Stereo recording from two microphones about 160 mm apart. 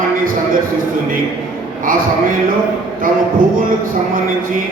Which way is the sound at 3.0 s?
60° right (ahead or behind).